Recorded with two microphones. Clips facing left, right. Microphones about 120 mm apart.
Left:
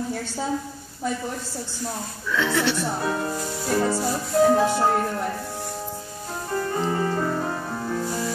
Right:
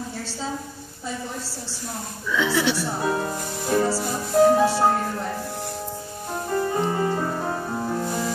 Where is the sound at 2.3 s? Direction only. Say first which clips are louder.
Right 1 dB; 5° right (ahead or behind).